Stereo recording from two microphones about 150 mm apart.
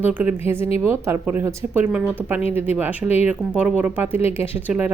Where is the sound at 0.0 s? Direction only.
10° right (ahead or behind).